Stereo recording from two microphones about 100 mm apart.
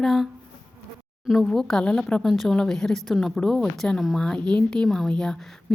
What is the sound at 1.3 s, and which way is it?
A woman's voice, centre (ahead or behind).